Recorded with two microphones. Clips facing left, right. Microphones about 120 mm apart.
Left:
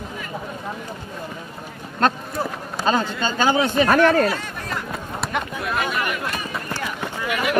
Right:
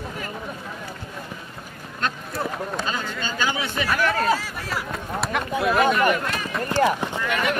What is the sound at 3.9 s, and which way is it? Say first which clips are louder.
Speech: left 6 dB; 50° left (ahead or behind).